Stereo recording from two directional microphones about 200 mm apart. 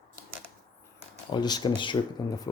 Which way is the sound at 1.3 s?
20° left (ahead or behind).